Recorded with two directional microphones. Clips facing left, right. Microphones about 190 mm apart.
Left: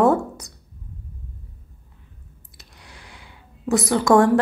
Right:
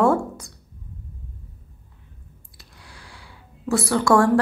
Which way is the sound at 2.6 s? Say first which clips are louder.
Left 1 dB; 20° left (ahead or behind).